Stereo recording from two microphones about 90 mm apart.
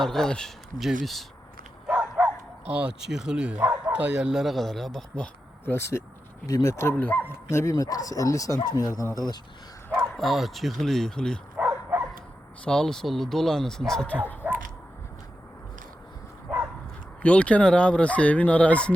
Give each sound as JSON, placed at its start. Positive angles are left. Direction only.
{"t": 0.0, "sound": "speech", "side_deg": 5}
{"t": 1.9, "sound": "bow-wow", "side_deg": -15}
{"t": 3.7, "sound": "speech", "side_deg": -20}
{"t": 5.6, "sound": "speech", "side_deg": 30}
{"t": 6.9, "sound": "speech", "side_deg": 20}
{"t": 9.1, "sound": "speech", "side_deg": 50}
{"t": 10.0, "sound": "speech", "side_deg": 0}
{"t": 11.5, "sound": "dog", "side_deg": -20}
{"t": 12.6, "sound": "speech", "side_deg": 5}
{"t": 14.4, "sound": "a sound", "side_deg": -15}
{"t": 17.2, "sound": "speech", "side_deg": 15}